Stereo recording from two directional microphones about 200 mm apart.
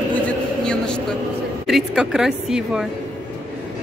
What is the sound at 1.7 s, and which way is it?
A woman's voice, centre (ahead or behind).